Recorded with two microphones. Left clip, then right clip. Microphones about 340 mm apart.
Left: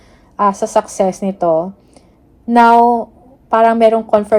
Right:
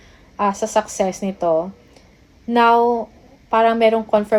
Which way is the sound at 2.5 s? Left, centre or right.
Left.